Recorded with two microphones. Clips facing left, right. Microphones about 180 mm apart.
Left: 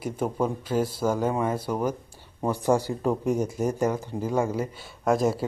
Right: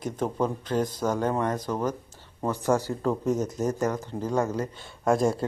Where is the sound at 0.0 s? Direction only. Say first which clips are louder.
Left 1 dB; 10° left (ahead or behind).